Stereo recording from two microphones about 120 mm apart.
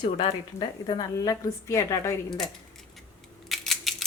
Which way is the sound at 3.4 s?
Centre (ahead or behind).